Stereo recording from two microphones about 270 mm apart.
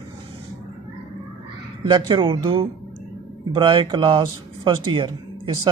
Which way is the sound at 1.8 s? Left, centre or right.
Centre.